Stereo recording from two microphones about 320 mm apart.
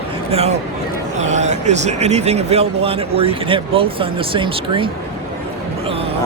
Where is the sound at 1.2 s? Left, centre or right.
Right.